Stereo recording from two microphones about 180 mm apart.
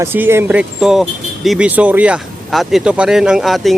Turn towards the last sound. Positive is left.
turn(degrees=0)  # may be behind; listen again after turning